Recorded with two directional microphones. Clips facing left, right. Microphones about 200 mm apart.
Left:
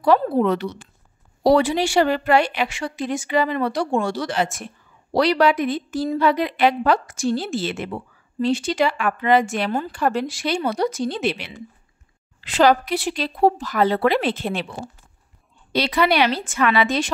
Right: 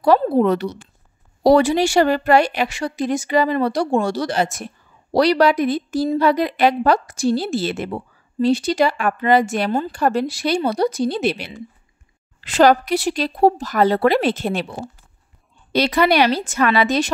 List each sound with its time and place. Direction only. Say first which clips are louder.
0.4 s a woman's voice: right 3 dB; 40° right (ahead or behind)
15.7 s a woman's voice: right 3 dB; 45° right (ahead or behind)